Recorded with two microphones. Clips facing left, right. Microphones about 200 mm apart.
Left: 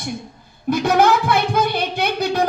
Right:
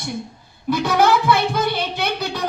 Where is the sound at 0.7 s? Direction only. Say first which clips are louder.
Left 1 dB; 50° left (ahead or behind).